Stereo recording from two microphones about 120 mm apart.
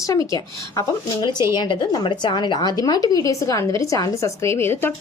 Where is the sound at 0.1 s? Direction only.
30° left (ahead or behind).